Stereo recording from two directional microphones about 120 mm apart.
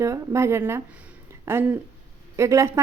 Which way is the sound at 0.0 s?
25° right (ahead or behind).